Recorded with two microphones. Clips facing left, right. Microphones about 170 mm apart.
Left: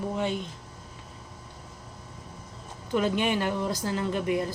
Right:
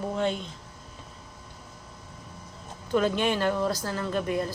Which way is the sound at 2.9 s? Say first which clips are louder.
Right 1 dB; 15° left (ahead or behind).